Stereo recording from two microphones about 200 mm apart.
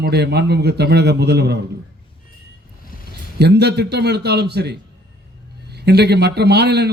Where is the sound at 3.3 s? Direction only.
55° right (ahead or behind).